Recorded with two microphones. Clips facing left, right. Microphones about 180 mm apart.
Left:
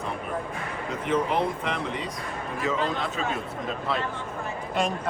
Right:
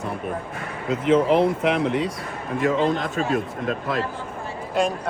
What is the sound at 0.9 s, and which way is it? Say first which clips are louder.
Speech: right 8 dB; 85° right.